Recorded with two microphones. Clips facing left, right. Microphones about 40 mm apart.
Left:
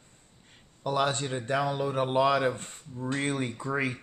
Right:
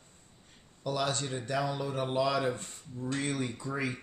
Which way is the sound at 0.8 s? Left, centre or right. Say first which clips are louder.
Left 4 dB; left.